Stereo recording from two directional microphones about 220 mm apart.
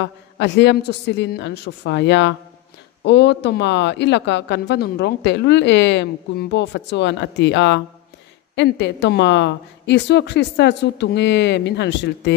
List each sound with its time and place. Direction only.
0.0 s speech: 50° left (ahead or behind)